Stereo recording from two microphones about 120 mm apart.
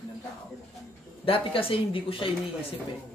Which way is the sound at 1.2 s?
50° left (ahead or behind).